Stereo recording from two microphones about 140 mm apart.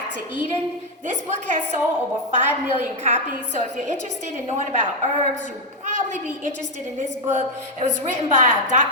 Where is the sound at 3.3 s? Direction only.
55° right (ahead or behind).